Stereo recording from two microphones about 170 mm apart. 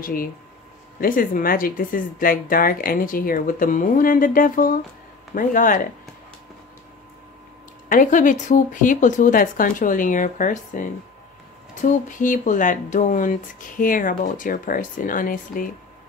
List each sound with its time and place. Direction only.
0.0 s speech: 55° left (ahead or behind)
7.9 s speech: 50° left (ahead or behind)